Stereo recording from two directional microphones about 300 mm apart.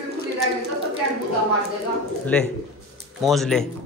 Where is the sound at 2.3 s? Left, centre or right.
Centre.